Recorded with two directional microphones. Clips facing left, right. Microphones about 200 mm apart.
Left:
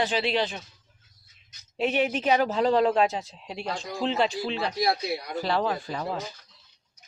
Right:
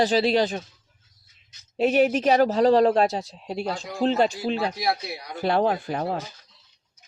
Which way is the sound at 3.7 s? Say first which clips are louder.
Right 1 dB; 5° right (ahead or behind).